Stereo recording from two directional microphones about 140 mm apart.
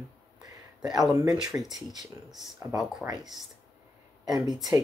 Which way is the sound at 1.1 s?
25° right (ahead or behind).